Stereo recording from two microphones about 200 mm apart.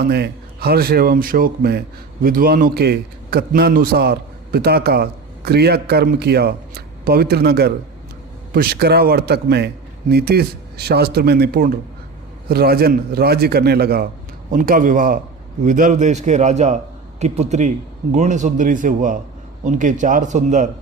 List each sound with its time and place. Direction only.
0.0 s a man's voice: 50° right (ahead or behind)